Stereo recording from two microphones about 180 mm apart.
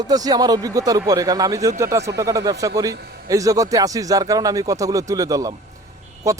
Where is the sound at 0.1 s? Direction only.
20° right (ahead or behind).